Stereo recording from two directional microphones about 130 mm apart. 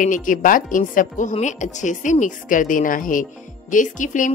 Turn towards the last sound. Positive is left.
turn(degrees=75)  # may be behind; listen again after turning